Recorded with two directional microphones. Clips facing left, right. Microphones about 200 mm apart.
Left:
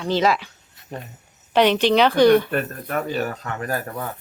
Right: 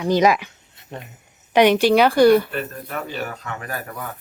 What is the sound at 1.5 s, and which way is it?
Speech, 10° right (ahead or behind).